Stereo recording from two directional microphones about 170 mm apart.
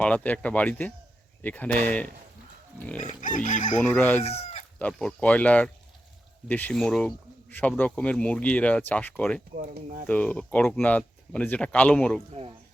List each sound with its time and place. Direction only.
0.0 s speech: 10° left (ahead or behind)
3.0 s pig: 50° left (ahead or behind)
3.8 s speech: 10° left (ahead or behind)
4.2 s speech: 35° left (ahead or behind)
4.8 s speech: 5° left (ahead or behind)
9.6 s speech: 45° right (ahead or behind)
10.1 s speech: 10° left (ahead or behind)
12.3 s speech: 35° right (ahead or behind)